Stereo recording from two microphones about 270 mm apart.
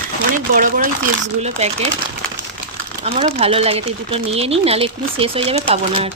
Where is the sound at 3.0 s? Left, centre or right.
Right.